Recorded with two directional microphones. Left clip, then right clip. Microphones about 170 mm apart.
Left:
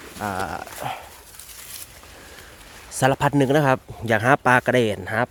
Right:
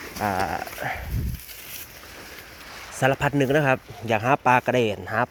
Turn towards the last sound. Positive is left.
turn(degrees=30)  # may be behind; listen again after turning